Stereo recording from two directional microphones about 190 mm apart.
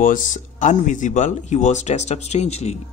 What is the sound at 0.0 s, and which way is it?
Speech, 45° left (ahead or behind).